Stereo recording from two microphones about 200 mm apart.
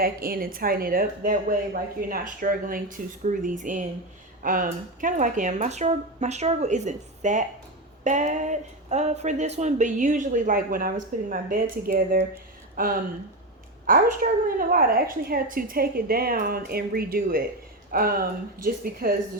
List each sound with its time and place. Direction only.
0.0 s a woman's voice: 45° right (ahead or behind)
12.3 s a sound: 45° right (ahead or behind)
13.8 s a woman's voice: 45° right (ahead or behind)